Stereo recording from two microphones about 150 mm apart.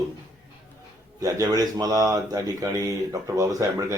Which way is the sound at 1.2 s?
25° right (ahead or behind).